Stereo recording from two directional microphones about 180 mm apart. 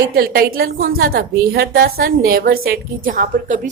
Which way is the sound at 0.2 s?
55° right (ahead or behind).